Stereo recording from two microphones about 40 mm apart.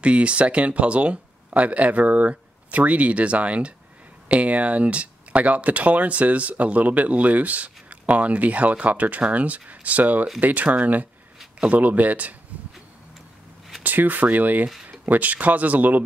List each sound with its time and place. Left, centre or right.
0.0 s speech: right
13.8 s speech: right